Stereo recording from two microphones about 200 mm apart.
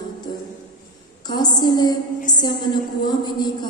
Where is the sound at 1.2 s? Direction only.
20° left (ahead or behind).